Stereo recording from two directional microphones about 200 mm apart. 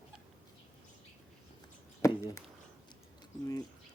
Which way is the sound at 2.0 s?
15° left (ahead or behind).